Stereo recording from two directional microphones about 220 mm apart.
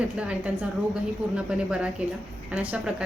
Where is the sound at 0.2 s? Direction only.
5° right (ahead or behind).